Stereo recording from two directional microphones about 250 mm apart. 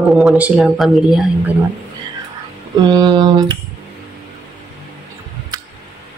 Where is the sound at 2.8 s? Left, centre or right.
Centre.